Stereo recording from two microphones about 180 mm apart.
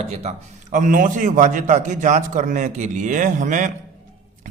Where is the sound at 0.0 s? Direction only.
35° right (ahead or behind).